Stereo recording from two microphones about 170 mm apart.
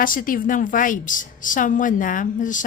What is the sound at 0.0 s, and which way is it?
A woman's voice, 55° left (ahead or behind).